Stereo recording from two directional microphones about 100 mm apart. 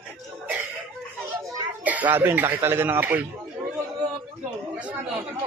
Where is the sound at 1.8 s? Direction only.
15° right (ahead or behind).